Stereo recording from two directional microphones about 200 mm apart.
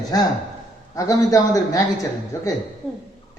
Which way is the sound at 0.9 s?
15° left (ahead or behind).